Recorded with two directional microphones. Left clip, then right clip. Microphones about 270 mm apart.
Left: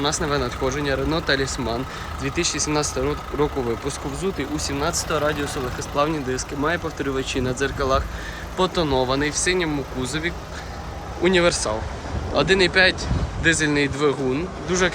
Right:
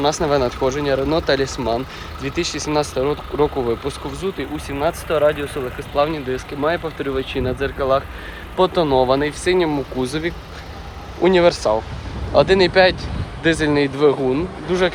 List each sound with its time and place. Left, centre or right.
0.0 s speech: centre
11.2 s speech: centre